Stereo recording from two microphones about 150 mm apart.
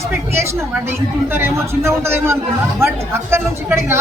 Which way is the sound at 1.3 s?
15° right (ahead or behind).